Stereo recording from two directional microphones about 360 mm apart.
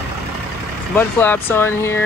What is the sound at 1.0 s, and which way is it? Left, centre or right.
Speech, centre.